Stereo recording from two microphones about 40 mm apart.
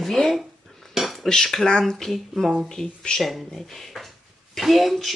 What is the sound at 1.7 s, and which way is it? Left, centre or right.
Speech, left.